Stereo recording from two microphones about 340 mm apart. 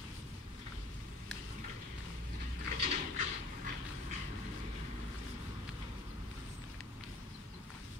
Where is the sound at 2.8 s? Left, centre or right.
Right.